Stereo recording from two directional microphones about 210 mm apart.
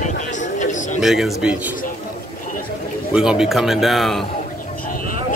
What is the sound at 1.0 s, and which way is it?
Speech, centre (ahead or behind).